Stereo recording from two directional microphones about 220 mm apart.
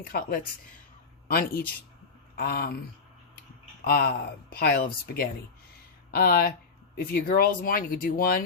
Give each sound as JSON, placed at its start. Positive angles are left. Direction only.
{"t": 0.0, "sound": "speech", "side_deg": 40}
{"t": 3.8, "sound": "speech", "side_deg": 45}